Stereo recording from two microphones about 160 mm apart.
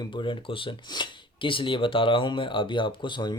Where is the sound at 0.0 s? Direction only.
30° left (ahead or behind).